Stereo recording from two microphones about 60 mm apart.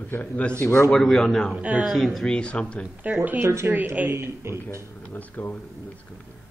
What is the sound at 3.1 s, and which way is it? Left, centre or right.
Speech, right.